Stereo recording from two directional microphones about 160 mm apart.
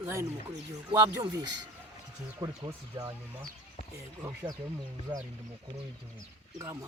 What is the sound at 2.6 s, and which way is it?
Speech, 20° right (ahead or behind).